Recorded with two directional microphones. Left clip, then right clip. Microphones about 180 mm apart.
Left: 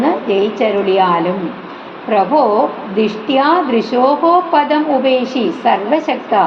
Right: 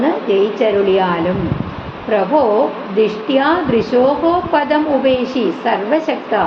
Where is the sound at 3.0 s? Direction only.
45° left (ahead or behind).